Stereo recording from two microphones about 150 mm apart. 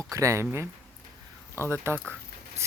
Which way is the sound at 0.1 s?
20° right (ahead or behind).